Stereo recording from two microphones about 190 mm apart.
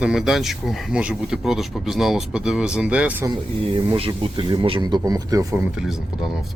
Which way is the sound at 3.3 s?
25° right (ahead or behind).